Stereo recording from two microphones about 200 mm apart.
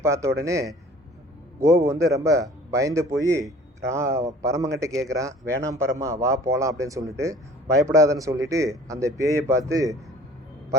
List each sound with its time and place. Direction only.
0.0 s a man's voice: 15° right (ahead or behind)